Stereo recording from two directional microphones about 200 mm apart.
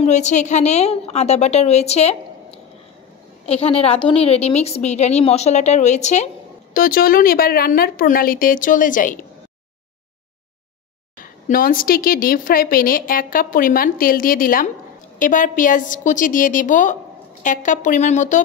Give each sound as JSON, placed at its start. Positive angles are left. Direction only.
{"t": 0.0, "sound": "a woman's voice", "side_deg": 35}
{"t": 6.7, "sound": "a woman's voice", "side_deg": 45}
{"t": 11.4, "sound": "a woman's voice", "side_deg": 45}